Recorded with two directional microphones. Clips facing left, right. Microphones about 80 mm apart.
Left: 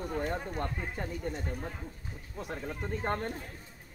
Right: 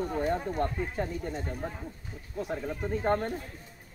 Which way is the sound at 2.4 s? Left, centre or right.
Centre.